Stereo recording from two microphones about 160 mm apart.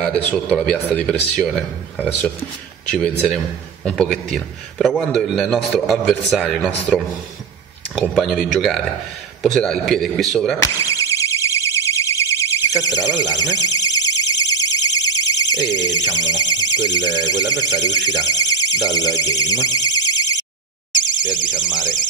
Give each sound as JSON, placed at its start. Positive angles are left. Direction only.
{"t": 0.0, "sound": "a man's voice", "side_deg": 0}
{"t": 2.9, "sound": "a man's voice", "side_deg": 5}
{"t": 10.6, "sound": "alarm", "side_deg": 20}